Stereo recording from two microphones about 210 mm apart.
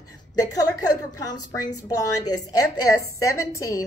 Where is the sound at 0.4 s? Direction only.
15° left (ahead or behind).